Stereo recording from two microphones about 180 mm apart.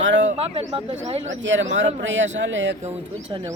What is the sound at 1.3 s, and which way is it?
Speech, 90° right.